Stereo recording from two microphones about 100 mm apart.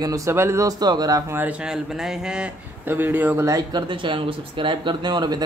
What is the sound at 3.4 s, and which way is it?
Speech, 35° right (ahead or behind).